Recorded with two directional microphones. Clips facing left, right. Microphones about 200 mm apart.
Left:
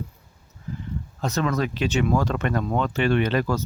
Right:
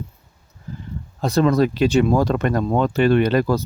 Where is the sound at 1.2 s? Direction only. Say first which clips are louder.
Right 8 dB; 35° right (ahead or behind).